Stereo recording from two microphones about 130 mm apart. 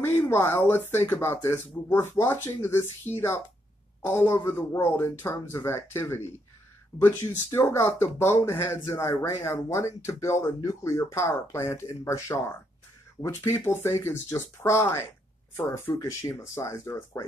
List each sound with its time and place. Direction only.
0.0 s speech: 20° left (ahead or behind)